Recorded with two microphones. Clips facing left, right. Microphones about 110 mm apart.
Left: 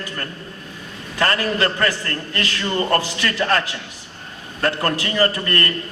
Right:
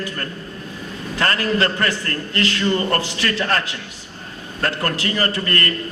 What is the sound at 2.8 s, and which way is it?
Speech, 30° left (ahead or behind).